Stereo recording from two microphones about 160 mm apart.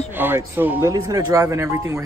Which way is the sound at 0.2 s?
10° right (ahead or behind).